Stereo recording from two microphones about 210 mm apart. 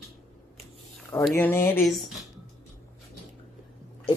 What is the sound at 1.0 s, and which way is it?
Speech, 5° left (ahead or behind).